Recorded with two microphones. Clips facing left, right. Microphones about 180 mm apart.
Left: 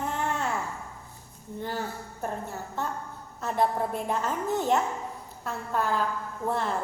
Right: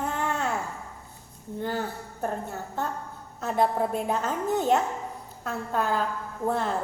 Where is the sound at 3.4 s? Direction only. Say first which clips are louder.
Right 2 dB; 45° right (ahead or behind).